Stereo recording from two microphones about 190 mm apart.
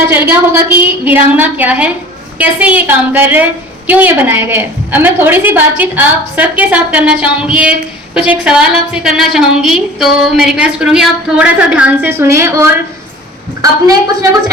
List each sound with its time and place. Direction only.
0.1 s a woman's voice: 10° right (ahead or behind)